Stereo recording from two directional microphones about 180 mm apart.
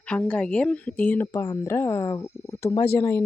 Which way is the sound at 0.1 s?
5° left (ahead or behind).